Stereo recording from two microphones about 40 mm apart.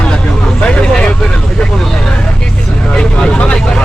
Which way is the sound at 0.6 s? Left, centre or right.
Left.